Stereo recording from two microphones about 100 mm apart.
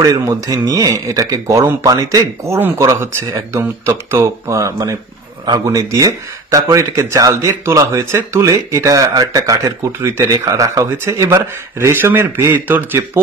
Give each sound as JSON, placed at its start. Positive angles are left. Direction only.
{"t": 0.5, "sound": "speech", "side_deg": -35}